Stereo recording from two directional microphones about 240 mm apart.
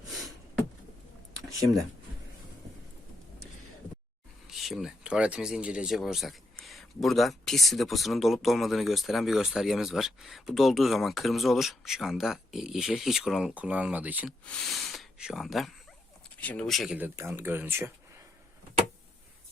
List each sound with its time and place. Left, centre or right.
4.4 s speech: centre